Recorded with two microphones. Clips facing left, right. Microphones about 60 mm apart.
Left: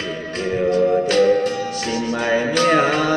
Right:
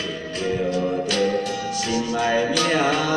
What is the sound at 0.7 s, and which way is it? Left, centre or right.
Music, left.